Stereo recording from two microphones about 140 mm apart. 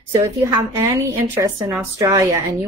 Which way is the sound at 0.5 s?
25° right (ahead or behind).